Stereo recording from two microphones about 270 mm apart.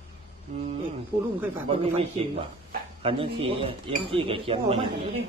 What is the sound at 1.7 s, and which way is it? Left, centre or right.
Speech, right.